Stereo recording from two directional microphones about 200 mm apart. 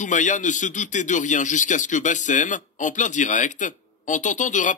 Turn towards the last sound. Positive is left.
turn(degrees=40)  # may be behind; listen again after turning